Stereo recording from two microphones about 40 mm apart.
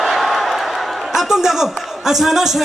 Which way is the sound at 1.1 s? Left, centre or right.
Centre.